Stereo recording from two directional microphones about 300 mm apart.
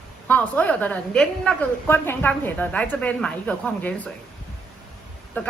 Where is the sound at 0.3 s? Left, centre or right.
Centre.